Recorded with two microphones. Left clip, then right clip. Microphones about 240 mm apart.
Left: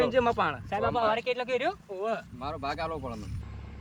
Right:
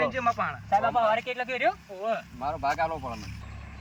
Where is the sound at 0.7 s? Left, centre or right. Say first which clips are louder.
Right 7 dB; centre.